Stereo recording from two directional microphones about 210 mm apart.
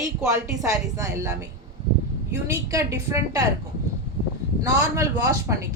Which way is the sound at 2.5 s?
15° right (ahead or behind).